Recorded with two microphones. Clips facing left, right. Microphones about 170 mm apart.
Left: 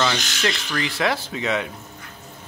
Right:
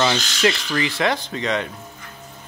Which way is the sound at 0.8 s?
Centre (ahead or behind).